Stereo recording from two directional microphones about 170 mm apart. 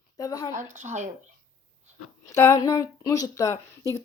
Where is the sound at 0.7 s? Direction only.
45° right (ahead or behind).